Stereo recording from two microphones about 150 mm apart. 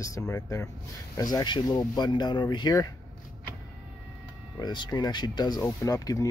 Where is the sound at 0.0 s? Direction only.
20° left (ahead or behind).